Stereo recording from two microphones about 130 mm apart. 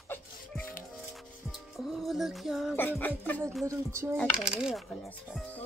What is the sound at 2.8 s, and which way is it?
Music, 15° left (ahead or behind).